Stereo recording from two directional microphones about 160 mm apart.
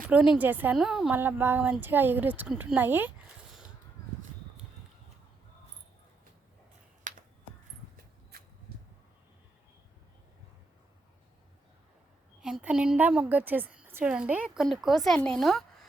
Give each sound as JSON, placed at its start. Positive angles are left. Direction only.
{"t": 0.1, "sound": "a woman's voice", "side_deg": -10}
{"t": 7.1, "sound": "finger snapping", "side_deg": -55}
{"t": 8.3, "sound": "a sound", "side_deg": -70}
{"t": 12.4, "sound": "a woman's voice", "side_deg": -5}